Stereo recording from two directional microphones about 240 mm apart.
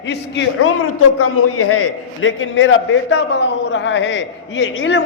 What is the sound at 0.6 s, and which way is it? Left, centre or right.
A man's voice, left.